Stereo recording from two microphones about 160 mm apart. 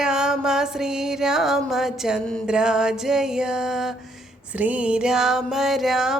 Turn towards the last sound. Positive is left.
turn(degrees=0)  # may be behind; listen again after turning